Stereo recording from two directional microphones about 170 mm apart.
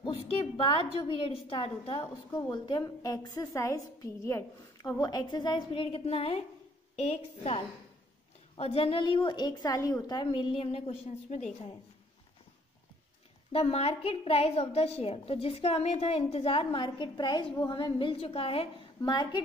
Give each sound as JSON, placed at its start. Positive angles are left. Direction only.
{"t": 0.0, "sound": "a sound", "side_deg": 30}
{"t": 0.9, "sound": "a woman's voice", "side_deg": 30}
{"t": 8.5, "sound": "a woman's voice", "side_deg": 35}
{"t": 13.5, "sound": "a woman's voice", "side_deg": 35}